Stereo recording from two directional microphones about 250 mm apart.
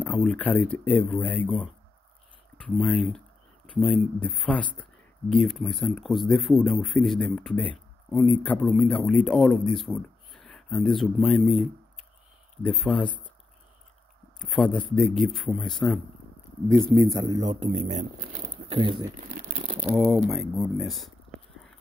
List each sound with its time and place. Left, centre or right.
0.0 s speech: centre
12.6 s speech: centre
14.4 s speech: centre
16.7 s speech: centre
19.8 s speech: centre